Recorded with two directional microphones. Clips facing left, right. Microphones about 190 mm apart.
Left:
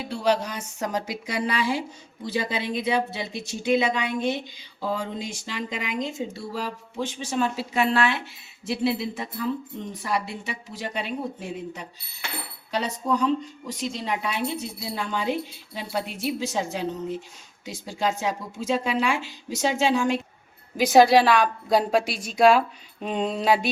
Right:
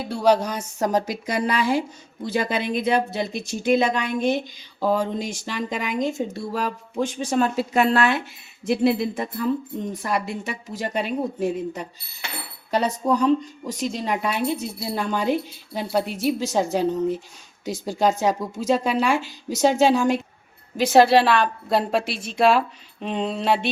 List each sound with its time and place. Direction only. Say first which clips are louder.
0.0 s speech: right 5 dB; 40° right (ahead or behind)
20.7 s a woman's voice: right 1 dB; centre (ahead or behind)